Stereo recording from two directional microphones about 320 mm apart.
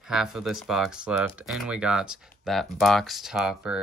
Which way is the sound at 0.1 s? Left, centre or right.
Centre.